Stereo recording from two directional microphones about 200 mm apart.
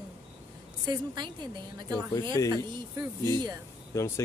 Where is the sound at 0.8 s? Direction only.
20° right (ahead or behind).